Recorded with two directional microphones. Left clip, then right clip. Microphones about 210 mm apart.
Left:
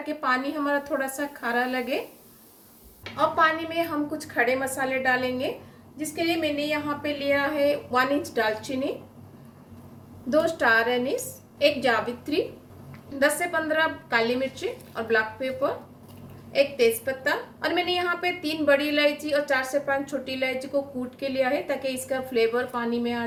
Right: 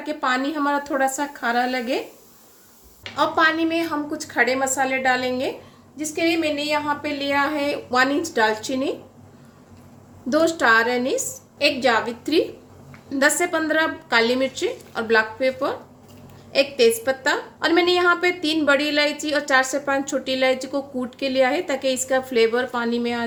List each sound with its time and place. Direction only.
0.0 s a woman's voice: 45° right (ahead or behind)
3.2 s a woman's voice: 45° right (ahead or behind)
10.2 s a woman's voice: 45° right (ahead or behind)